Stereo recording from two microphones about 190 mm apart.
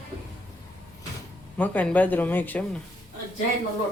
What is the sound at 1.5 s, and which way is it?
A man's voice, 10° left (ahead or behind).